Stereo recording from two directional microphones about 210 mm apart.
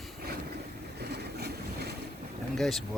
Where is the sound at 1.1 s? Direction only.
50° right (ahead or behind).